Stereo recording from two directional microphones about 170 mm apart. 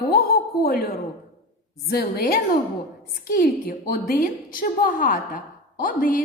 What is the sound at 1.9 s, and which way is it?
A woman's voice, 65° left (ahead or behind).